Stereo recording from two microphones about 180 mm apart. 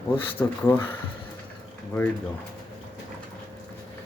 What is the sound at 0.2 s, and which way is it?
Speech, 10° left (ahead or behind).